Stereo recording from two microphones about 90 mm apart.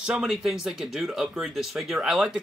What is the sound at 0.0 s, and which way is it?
Speech, 10° right (ahead or behind).